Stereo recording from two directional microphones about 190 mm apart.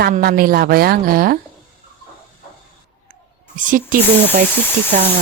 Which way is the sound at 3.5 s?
45° right (ahead or behind).